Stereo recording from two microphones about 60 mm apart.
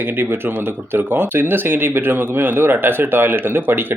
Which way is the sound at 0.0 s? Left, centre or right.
Right.